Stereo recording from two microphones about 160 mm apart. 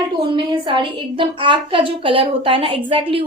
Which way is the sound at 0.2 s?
30° right (ahead or behind).